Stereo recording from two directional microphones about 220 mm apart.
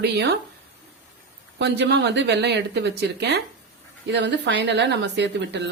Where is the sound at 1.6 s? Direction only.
50° right (ahead or behind).